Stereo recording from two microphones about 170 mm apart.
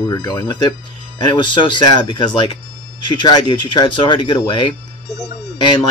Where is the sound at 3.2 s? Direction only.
25° left (ahead or behind).